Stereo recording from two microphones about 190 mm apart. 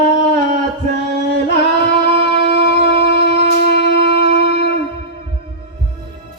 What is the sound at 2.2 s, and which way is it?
Shofar, 65° left (ahead or behind).